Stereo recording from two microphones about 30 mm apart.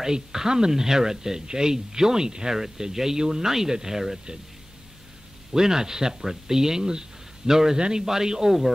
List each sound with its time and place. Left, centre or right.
0.0 s speech: centre
5.5 s speech: centre